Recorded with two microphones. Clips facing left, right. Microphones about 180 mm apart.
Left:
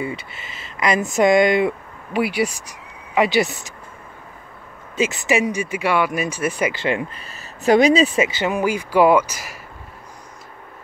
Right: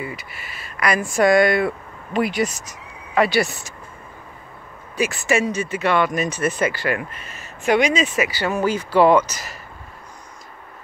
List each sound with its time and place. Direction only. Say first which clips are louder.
0.0 s speech: left 4 dB; 25° left (ahead or behind)
4.9 s speech: left 1 dB; 20° left (ahead or behind)
7.2 s speech: left 3 dB; 35° left (ahead or behind)
8.3 s speech: left 1 dB; 20° left (ahead or behind)